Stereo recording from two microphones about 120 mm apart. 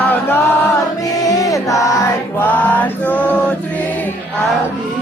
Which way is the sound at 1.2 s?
30° left (ahead or behind).